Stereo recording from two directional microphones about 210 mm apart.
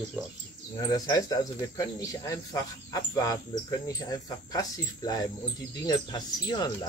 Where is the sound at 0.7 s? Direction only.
15° left (ahead or behind).